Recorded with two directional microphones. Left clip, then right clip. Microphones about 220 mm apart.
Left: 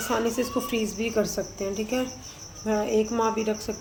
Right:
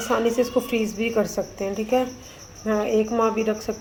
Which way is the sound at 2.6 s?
5° right (ahead or behind).